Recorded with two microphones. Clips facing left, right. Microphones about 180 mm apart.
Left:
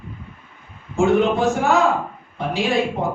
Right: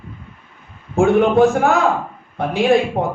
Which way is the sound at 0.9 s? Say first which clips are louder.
Right 3 dB; 55° right (ahead or behind).